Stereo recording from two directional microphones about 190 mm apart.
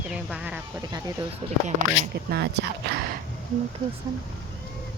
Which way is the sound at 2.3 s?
60° right (ahead or behind).